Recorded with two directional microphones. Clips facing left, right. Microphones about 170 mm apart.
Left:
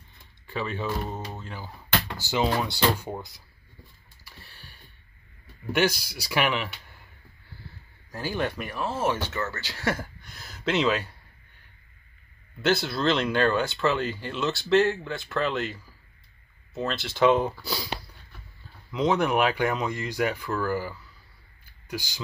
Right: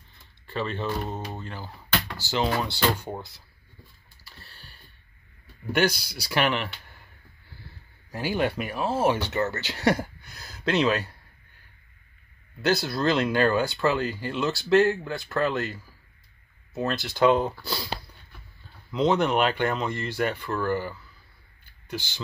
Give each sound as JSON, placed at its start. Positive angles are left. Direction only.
{"t": 0.5, "sound": "speech", "side_deg": 10}
{"t": 5.7, "sound": "speech", "side_deg": 5}
{"t": 8.1, "sound": "speech", "side_deg": -10}
{"t": 10.3, "sound": "speech", "side_deg": 0}
{"t": 12.6, "sound": "speech", "side_deg": 0}
{"t": 16.9, "sound": "speech", "side_deg": 0}
{"t": 18.9, "sound": "speech", "side_deg": 5}